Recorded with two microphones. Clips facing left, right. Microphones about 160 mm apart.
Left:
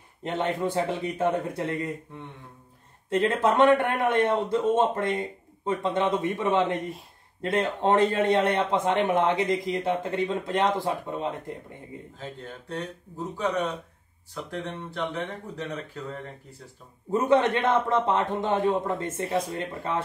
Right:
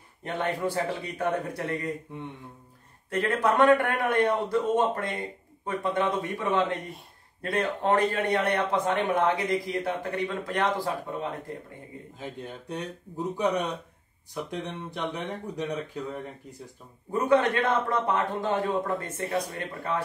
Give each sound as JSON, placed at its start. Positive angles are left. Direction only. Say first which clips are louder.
{"t": 0.2, "sound": "speech", "louder": "left 2 dB", "side_deg": 25}
{"t": 3.1, "sound": "speech", "louder": "left 2 dB", "side_deg": 25}
{"t": 12.2, "sound": "speech", "louder": "right 3 dB", "side_deg": -15}
{"t": 17.1, "sound": "speech", "louder": "left 1 dB", "side_deg": 20}